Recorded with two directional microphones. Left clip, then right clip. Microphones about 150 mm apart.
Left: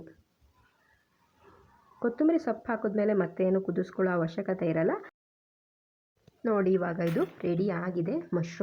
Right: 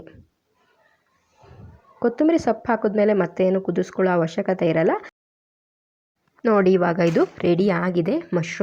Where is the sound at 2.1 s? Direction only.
40° right (ahead or behind).